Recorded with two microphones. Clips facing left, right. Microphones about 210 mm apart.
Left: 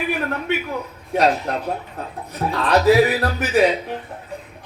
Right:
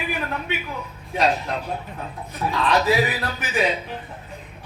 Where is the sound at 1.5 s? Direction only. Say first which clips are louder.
Left 4 dB; 65° left (ahead or behind).